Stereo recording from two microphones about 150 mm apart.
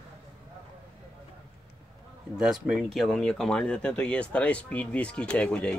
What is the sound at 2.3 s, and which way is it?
Speech, 5° right (ahead or behind).